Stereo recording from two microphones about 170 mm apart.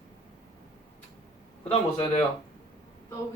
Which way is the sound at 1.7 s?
40° left (ahead or behind).